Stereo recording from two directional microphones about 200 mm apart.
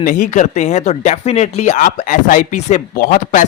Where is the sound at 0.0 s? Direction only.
40° left (ahead or behind).